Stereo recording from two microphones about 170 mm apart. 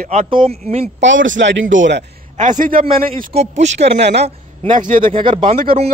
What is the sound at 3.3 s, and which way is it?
Speech, 40° right (ahead or behind).